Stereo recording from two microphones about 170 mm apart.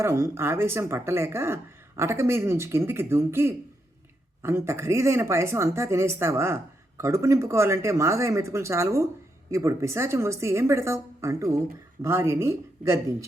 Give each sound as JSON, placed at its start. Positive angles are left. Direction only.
{"t": 0.0, "sound": "speech", "side_deg": -15}